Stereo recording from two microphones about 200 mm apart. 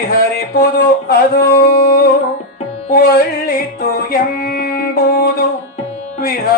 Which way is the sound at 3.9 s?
50° left (ahead or behind).